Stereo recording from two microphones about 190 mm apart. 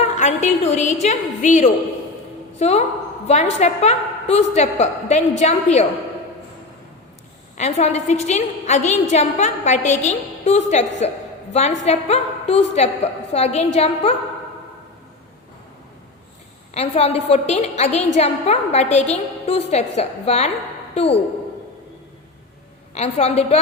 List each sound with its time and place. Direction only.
0.2 s a woman's voice: 40° left (ahead or behind)
7.5 s a woman's voice: 35° left (ahead or behind)
16.7 s a woman's voice: 35° left (ahead or behind)
23.0 s a woman's voice: 35° left (ahead or behind)